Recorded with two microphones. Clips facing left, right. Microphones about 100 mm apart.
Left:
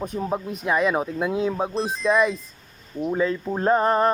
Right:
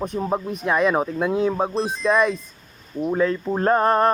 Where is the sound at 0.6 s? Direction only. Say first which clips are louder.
Right 2 dB; 5° left (ahead or behind).